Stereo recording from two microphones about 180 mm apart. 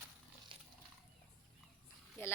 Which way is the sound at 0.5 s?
30° right (ahead or behind).